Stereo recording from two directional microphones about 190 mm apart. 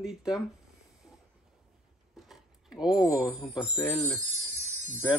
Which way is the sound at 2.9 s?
20° left (ahead or behind).